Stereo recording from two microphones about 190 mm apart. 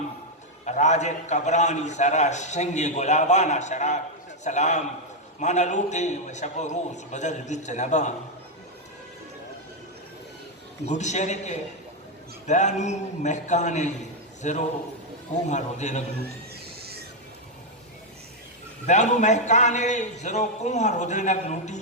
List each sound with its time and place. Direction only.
0.6 s a man's voice: 40° left (ahead or behind)
10.8 s a man's voice: 40° left (ahead or behind)
18.9 s a man's voice: 40° left (ahead or behind)